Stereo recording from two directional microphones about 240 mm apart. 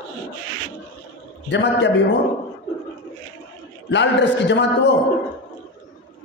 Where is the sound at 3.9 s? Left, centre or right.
Left.